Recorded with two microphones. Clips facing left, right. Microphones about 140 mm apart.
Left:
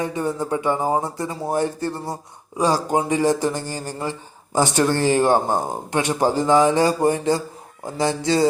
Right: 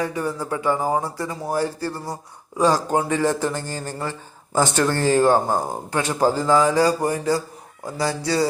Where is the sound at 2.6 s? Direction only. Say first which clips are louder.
Right 1 dB; 10° left (ahead or behind).